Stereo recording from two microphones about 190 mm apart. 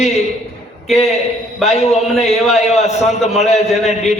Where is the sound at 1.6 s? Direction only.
35° left (ahead or behind).